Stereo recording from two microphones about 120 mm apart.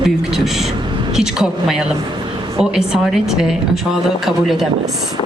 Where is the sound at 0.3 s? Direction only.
5° right (ahead or behind).